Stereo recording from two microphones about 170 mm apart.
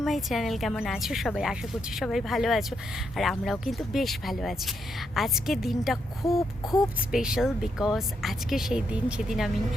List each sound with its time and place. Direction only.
0.0 s speech: centre (ahead or behind)
6.2 s a sound: 20° left (ahead or behind)
7.1 s speech: 5° right (ahead or behind)